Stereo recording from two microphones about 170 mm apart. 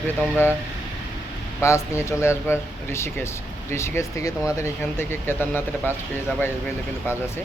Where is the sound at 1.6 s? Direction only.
15° left (ahead or behind).